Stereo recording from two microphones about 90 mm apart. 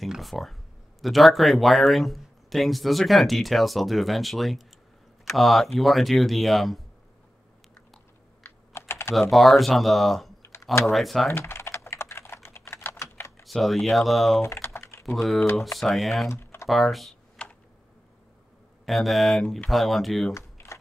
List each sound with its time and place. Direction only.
0.0 s speech: centre (ahead or behind)
8.5 s computer keyboard: 25° left (ahead or behind)
9.3 s speech: centre (ahead or behind)
10.4 s typing: 30° left (ahead or behind)
10.9 s speech: centre (ahead or behind)
11.2 s typing: 25° left (ahead or behind)
13.4 s speech: centre (ahead or behind)
14.4 s typing: 30° left (ahead or behind)
15.0 s speech: 5° left (ahead or behind)
16.3 s typing: 30° left (ahead or behind)
16.6 s speech: centre (ahead or behind)
18.9 s speech: centre (ahead or behind)
20.3 s a sound: 30° left (ahead or behind)